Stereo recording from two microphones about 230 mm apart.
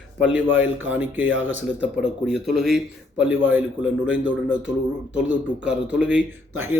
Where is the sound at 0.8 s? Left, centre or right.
Centre.